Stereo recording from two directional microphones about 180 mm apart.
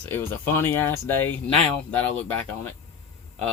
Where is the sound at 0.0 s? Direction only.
10° left (ahead or behind).